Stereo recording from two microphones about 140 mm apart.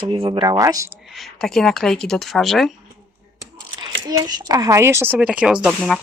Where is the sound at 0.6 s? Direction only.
25° right (ahead or behind).